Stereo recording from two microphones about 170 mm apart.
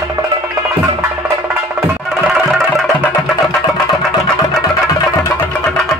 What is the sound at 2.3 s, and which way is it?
Music, centre (ahead or behind).